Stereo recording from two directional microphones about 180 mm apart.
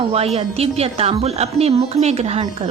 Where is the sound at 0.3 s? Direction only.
35° right (ahead or behind).